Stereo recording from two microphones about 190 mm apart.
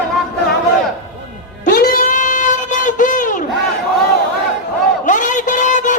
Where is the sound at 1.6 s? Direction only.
50° left (ahead or behind).